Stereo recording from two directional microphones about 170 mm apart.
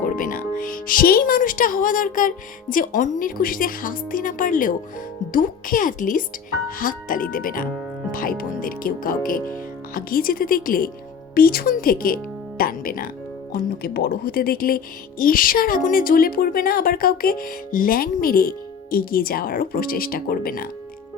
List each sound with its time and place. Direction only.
0.0 s a woman's voice: 50° left (ahead or behind)